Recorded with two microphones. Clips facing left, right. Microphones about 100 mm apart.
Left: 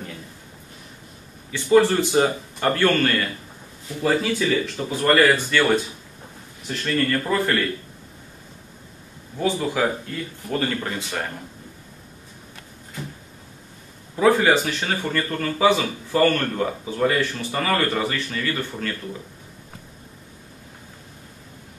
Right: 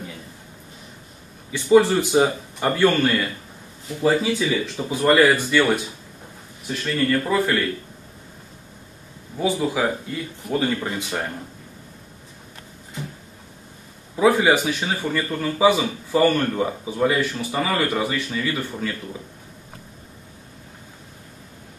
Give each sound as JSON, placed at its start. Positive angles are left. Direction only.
{"t": 1.5, "sound": "a man's voice", "side_deg": -15}
{"t": 6.9, "sound": "a man's voice", "side_deg": -10}
{"t": 9.4, "sound": "a man's voice", "side_deg": -10}
{"t": 14.1, "sound": "a man's voice", "side_deg": -10}